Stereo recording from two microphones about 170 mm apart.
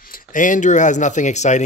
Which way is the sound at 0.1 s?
50° left (ahead or behind).